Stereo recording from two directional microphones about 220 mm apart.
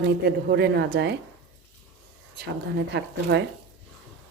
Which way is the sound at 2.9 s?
50° right (ahead or behind).